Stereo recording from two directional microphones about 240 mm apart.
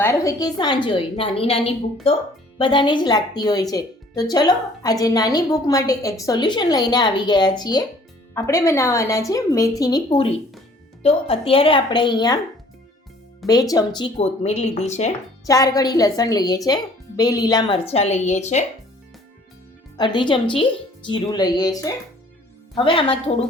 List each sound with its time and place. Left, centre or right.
0.0 s speech: centre
13.5 s speech: centre
15.4 s speech: centre
20.0 s speech: centre